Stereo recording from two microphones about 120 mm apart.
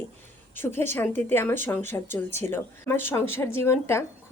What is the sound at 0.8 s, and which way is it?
Speech, 20° left (ahead or behind).